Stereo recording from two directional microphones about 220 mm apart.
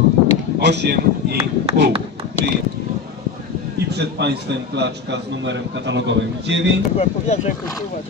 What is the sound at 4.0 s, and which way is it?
A man's voice, 50° right (ahead or behind).